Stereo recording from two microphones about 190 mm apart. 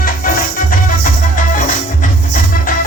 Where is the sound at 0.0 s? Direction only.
45° left (ahead or behind).